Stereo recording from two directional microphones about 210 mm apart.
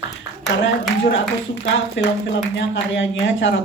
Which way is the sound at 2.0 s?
60° left (ahead or behind).